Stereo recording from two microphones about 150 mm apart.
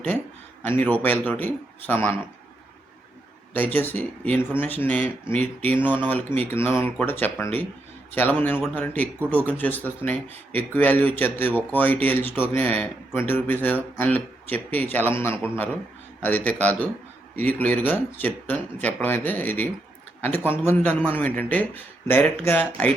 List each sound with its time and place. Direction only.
0.6 s speech: 15° left (ahead or behind)
3.5 s speech: 10° left (ahead or behind)